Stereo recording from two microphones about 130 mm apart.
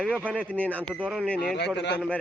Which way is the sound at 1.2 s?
10° left (ahead or behind).